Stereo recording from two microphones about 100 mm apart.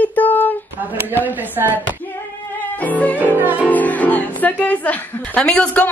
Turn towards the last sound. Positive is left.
turn(degrees=15)  # may be behind; listen again after turning